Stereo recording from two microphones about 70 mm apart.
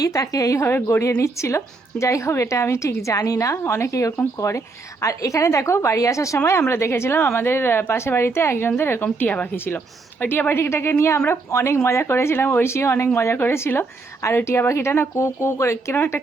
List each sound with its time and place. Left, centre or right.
0.0 s a woman's voice: left